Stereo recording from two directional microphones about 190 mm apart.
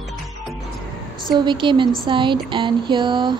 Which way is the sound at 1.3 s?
25° right (ahead or behind).